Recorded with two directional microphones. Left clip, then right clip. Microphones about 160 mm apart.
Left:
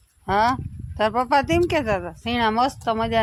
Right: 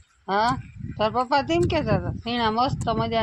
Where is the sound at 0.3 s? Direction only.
5° left (ahead or behind).